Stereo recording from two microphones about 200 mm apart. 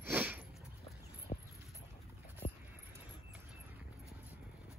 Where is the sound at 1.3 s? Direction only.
30° left (ahead or behind).